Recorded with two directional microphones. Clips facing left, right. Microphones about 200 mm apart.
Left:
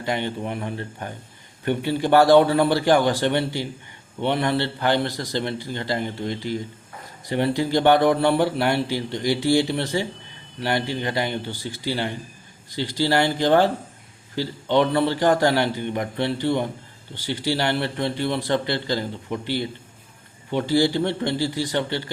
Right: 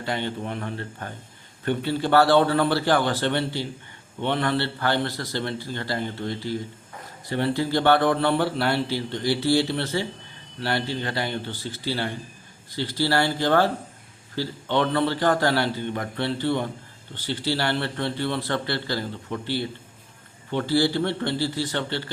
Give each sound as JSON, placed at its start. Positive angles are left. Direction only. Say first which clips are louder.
{"t": 0.0, "sound": "a man's voice", "louder": "left 2 dB", "side_deg": 15}